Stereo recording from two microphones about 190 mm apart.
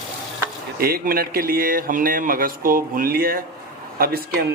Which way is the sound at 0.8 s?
55° right (ahead or behind).